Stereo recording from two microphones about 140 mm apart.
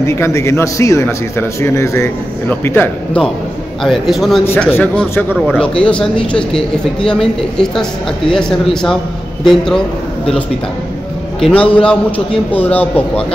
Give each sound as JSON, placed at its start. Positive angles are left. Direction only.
{"t": 0.0, "sound": "a man's voice", "side_deg": 20}
{"t": 3.8, "sound": "speech", "side_deg": 0}
{"t": 4.7, "sound": "a man's voice", "side_deg": 15}
{"t": 11.4, "sound": "a man's voice", "side_deg": 10}